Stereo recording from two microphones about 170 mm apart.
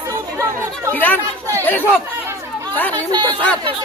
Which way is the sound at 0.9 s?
10° left (ahead or behind).